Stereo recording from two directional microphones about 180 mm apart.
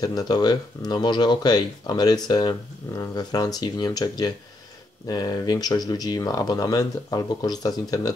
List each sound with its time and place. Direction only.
0.0 s speech: 20° left (ahead or behind)